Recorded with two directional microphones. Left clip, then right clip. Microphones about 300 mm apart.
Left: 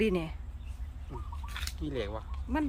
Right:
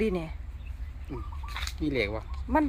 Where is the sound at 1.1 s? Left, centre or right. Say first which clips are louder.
Right 5 dB; right.